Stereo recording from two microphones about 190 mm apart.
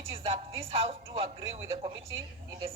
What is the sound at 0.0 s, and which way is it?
A woman's voice, 30° right (ahead or behind).